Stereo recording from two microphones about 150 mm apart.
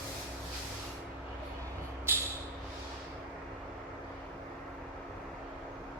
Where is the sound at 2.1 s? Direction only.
15° right (ahead or behind).